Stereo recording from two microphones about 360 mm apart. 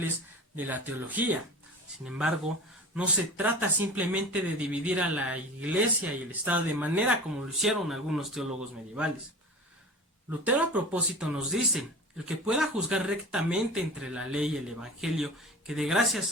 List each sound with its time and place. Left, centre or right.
0.5 s speech: centre
10.4 s speech: centre